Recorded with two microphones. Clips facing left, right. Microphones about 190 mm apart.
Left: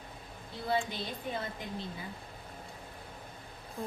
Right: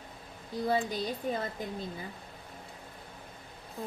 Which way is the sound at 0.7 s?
40° right (ahead or behind).